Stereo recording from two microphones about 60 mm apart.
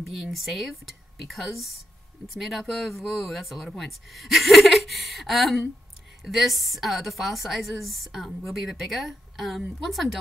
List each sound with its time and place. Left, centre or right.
0.0 s speech: centre